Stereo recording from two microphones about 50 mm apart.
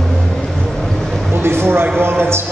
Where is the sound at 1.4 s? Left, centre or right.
Right.